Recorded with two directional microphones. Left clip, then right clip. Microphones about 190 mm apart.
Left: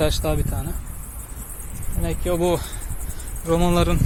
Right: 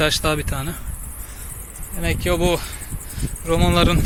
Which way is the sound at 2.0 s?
10° right (ahead or behind).